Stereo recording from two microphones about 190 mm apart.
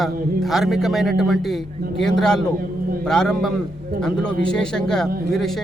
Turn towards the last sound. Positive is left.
turn(degrees=0)  # may be behind; listen again after turning